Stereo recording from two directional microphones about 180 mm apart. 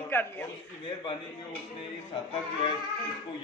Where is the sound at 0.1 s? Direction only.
10° left (ahead or behind).